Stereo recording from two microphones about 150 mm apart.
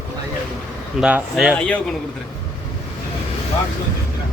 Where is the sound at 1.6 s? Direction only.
10° left (ahead or behind).